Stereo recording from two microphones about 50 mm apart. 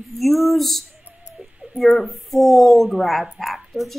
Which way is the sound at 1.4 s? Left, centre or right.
Right.